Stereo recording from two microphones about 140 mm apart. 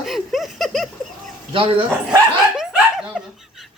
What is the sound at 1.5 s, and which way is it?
Speech, 40° right (ahead or behind).